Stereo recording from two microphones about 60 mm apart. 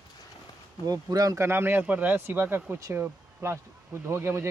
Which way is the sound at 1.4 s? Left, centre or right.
Right.